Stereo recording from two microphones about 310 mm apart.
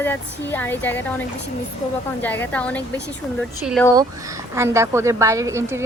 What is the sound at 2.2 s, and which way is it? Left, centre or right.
A woman's voice, centre.